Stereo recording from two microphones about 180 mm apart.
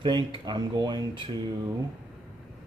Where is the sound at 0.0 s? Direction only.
25° right (ahead or behind).